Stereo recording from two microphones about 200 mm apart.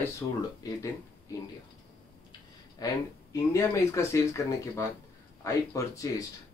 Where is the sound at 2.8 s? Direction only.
20° left (ahead or behind).